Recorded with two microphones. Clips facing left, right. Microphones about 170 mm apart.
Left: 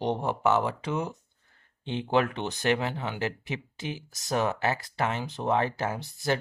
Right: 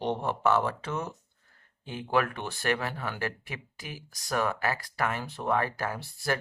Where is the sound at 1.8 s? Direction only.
25° left (ahead or behind).